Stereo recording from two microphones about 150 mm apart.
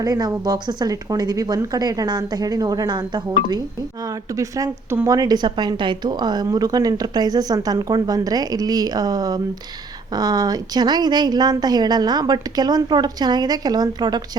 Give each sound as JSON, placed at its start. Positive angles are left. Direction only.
{"t": 0.0, "sound": "a woman's voice", "side_deg": -25}